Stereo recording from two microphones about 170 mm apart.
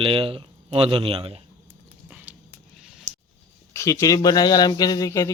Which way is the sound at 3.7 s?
15° left (ahead or behind).